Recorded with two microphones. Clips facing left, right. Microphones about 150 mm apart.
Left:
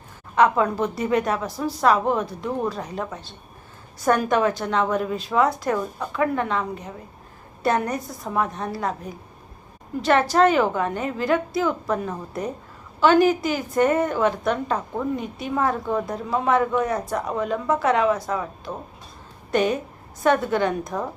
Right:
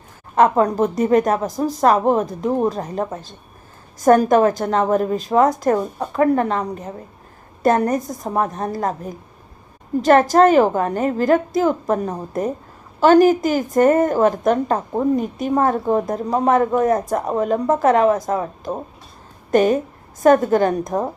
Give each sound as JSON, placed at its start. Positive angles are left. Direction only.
{"t": 0.3, "sound": "a woman's voice", "side_deg": -45}